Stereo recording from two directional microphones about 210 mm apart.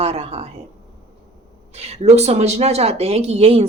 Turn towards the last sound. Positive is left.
turn(degrees=-30)  # may be behind; listen again after turning